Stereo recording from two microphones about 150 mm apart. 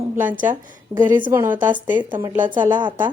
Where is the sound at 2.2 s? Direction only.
15° right (ahead or behind).